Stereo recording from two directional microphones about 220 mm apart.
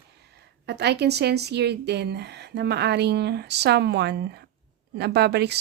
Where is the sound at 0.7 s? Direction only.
50° right (ahead or behind).